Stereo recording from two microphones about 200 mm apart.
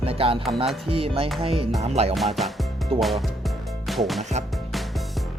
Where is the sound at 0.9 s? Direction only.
30° right (ahead or behind).